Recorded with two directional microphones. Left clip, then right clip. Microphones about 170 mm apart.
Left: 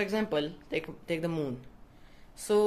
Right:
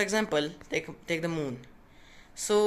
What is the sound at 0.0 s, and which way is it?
Speech, centre (ahead or behind).